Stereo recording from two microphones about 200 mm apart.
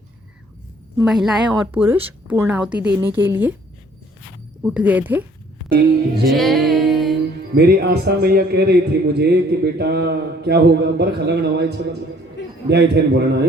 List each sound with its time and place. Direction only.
1.0 s a woman's voice: centre (ahead or behind)
4.6 s a woman's voice: 5° right (ahead or behind)
6.2 s music: centre (ahead or behind)
7.5 s a man's voice: 55° right (ahead or behind)